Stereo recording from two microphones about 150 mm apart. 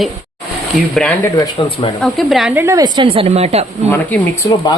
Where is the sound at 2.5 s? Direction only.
20° right (ahead or behind); by 3.6 s 45° right (ahead or behind).